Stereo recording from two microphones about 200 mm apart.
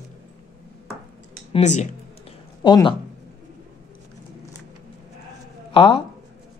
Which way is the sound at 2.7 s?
20° left (ahead or behind).